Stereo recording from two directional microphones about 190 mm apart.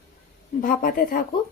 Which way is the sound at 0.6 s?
50° left (ahead or behind).